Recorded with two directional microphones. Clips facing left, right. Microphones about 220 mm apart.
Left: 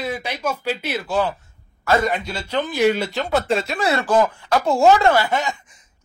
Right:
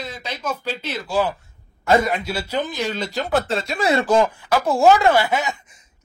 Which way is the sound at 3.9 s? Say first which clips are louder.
Right 1 dB; 15° right (ahead or behind).